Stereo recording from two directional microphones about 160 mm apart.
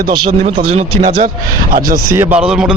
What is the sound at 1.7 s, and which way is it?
Speech, 65° right (ahead or behind).